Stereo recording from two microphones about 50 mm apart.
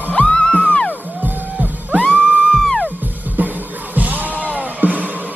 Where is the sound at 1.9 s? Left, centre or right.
Left.